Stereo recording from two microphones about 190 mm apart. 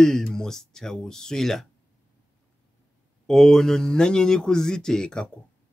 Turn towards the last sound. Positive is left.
turn(degrees=5)  # may be behind; listen again after turning